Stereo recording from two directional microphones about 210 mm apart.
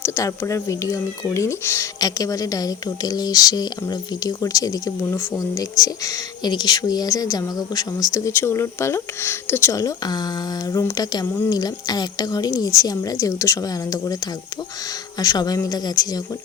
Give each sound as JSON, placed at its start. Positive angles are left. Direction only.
{"t": 0.0, "sound": "speech", "side_deg": 15}
{"t": 15.2, "sound": "speech", "side_deg": 15}